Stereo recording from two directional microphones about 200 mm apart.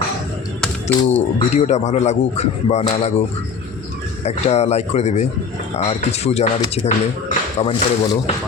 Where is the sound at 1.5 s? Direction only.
35° left (ahead or behind).